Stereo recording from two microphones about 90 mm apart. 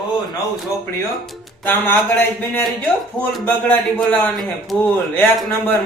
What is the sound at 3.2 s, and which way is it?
Speech, 20° left (ahead or behind).